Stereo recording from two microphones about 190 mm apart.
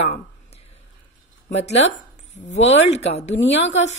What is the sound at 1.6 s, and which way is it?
Speech, 35° left (ahead or behind).